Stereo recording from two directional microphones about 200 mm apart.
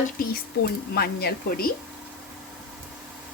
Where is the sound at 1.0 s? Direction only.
50° left (ahead or behind).